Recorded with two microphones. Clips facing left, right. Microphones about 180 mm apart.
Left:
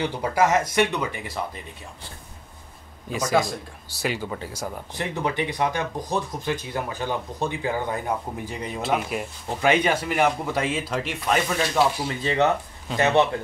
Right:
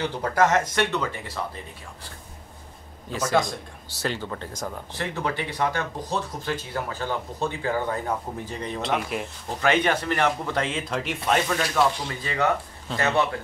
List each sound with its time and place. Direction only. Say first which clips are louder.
0.0 s speech: even; 10° left (ahead or behind)
3.1 s speech: left 1 dB; 15° left (ahead or behind)
12.2 s speech: left 4 dB; 25° left (ahead or behind)